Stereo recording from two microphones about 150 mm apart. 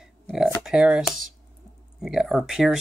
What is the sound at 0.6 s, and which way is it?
Speech, 5° right (ahead or behind).